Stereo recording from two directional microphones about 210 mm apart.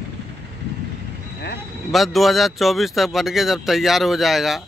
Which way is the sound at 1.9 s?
Centre (ahead or behind).